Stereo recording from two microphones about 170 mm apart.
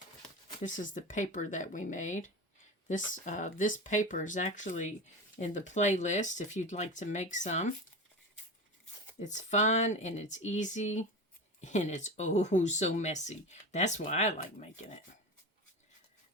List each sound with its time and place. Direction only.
0.6 s speech: 50° left (ahead or behind)
9.1 s speech: 45° left (ahead or behind)